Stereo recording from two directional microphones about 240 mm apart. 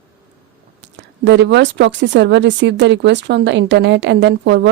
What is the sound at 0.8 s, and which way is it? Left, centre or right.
Speech, right.